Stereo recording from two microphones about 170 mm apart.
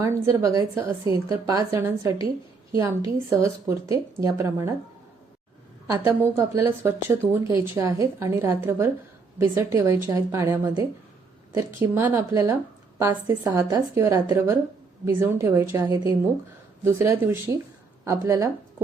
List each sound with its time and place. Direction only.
0.0 s a woman's voice: 15° right (ahead or behind)
5.9 s a woman's voice: 20° right (ahead or behind)